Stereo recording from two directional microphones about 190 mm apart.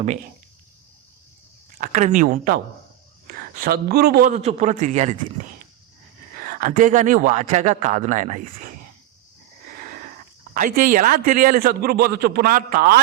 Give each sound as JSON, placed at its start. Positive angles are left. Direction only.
{"t": 1.8, "sound": "a man's voice", "side_deg": -40}
{"t": 4.3, "sound": "speech", "side_deg": -35}
{"t": 6.3, "sound": "speech", "side_deg": -50}
{"t": 9.8, "sound": "sniff", "side_deg": -45}
{"t": 10.5, "sound": "a man's voice", "side_deg": -45}